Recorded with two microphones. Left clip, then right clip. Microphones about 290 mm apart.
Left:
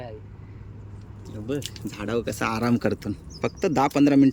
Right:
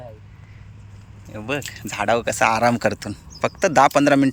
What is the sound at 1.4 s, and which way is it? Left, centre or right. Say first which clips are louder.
Speech: right 5 dB; centre.